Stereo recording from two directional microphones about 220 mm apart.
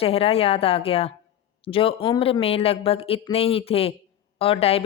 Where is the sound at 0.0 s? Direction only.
25° left (ahead or behind).